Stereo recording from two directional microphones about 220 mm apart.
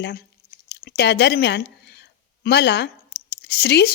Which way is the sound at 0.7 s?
45° left (ahead or behind).